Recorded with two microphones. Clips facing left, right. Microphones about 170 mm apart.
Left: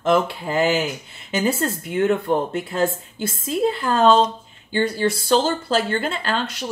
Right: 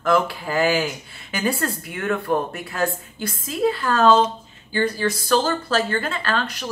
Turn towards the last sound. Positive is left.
turn(degrees=25)  # may be behind; listen again after turning